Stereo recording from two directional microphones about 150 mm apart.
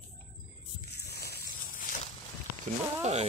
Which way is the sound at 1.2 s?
65° left (ahead or behind).